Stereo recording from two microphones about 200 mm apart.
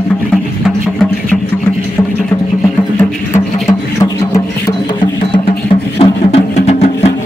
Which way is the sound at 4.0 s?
15° left (ahead or behind).